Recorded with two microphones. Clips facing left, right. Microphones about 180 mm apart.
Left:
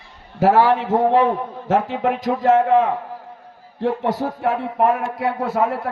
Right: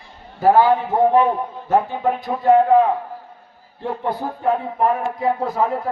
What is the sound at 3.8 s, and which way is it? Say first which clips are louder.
A man's voice: left 3 dB; 90° left.